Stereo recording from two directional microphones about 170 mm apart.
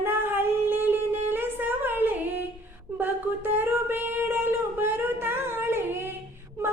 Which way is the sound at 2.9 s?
10° right (ahead or behind).